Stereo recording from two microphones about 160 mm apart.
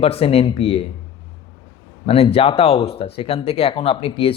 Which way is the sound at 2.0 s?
35° left (ahead or behind).